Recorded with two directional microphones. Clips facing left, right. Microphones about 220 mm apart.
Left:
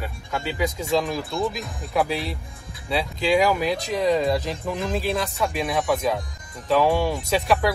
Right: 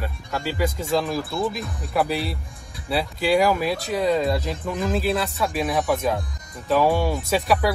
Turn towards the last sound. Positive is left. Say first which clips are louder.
# even
turn(degrees=-5)  # may be behind; listen again after turning